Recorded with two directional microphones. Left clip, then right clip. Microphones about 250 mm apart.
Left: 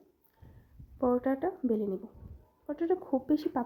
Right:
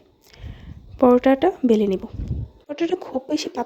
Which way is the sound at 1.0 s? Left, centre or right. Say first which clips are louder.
Right 14 dB; right.